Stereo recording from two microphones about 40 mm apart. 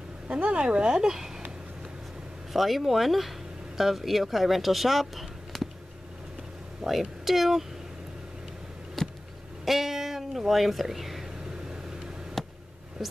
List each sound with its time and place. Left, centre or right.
0.3 s speech: right
2.5 s speech: centre
6.8 s speech: centre
9.0 s a sound: centre
9.7 s speech: centre
11.7 s vehicle: centre
12.4 s a sound: centre
13.0 s speech: centre